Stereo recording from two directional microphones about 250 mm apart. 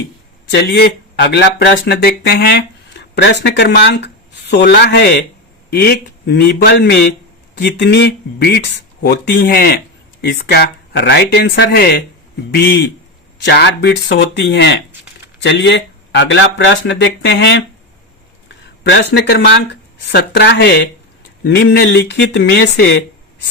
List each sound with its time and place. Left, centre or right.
0.5 s speech: left
18.4 s a sound: left
20.1 s speech: left